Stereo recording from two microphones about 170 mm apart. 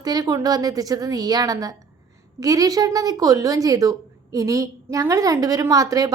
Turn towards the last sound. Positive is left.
turn(degrees=-20)  # may be behind; listen again after turning